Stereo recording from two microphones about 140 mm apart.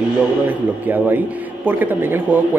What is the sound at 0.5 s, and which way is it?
Speech, 15° right (ahead or behind).